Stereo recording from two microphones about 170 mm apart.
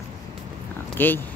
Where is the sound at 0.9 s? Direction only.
10° left (ahead or behind).